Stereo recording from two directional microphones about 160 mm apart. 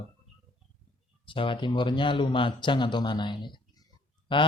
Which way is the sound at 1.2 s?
30° left (ahead or behind).